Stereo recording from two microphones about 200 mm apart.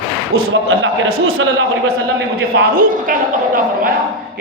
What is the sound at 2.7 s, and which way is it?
A woman's voice, 45° right (ahead or behind).